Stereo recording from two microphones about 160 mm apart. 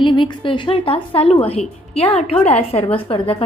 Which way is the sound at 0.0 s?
30° left (ahead or behind).